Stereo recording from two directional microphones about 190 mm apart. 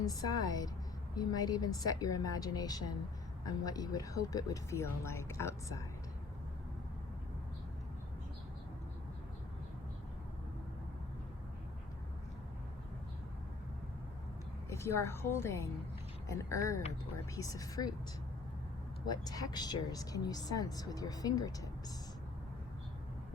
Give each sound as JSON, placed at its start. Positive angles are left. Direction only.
{"t": 0.0, "sound": "speech", "side_deg": 20}
{"t": 14.7, "sound": "speech", "side_deg": 15}
{"t": 19.0, "sound": "speech", "side_deg": 20}